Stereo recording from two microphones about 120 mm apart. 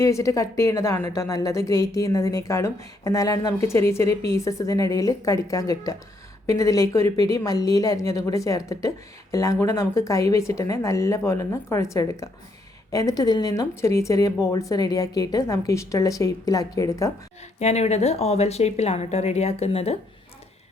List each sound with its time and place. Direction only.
0.0 s a woman's voice: 25° left (ahead or behind)
17.6 s speech: 65° left (ahead or behind)